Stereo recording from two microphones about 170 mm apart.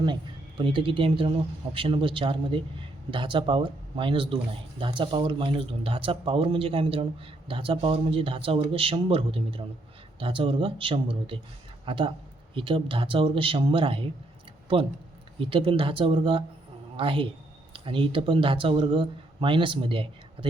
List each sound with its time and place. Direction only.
0.0 s speech: 30° right (ahead or behind)
15.4 s speech: 30° right (ahead or behind)